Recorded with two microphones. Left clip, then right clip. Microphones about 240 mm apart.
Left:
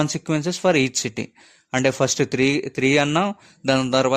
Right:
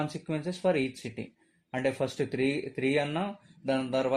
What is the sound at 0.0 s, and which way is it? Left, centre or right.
Speech, left.